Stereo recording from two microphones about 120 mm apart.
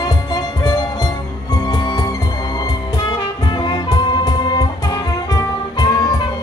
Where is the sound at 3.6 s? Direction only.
35° left (ahead or behind).